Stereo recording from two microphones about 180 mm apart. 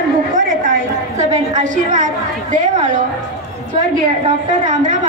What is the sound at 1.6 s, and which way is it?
A woman's voice, 45° right (ahead or behind).